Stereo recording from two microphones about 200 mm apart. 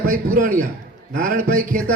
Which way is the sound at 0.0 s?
45° right (ahead or behind).